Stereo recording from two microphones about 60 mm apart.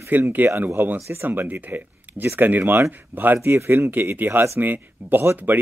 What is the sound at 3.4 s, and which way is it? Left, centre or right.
Speech, right.